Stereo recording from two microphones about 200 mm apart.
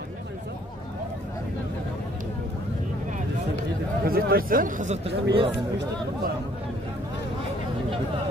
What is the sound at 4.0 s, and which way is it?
Speech, 50° right (ahead or behind).